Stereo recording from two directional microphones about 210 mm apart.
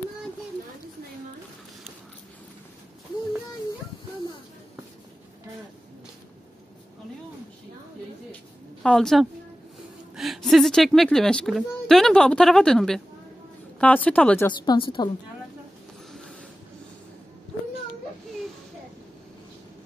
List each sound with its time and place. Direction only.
8.8 s a woman's voice: centre (ahead or behind)
14.6 s a woman's voice: 20° left (ahead or behind)